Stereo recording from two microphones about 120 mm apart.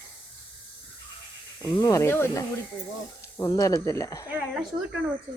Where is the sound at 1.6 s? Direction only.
35° left (ahead or behind).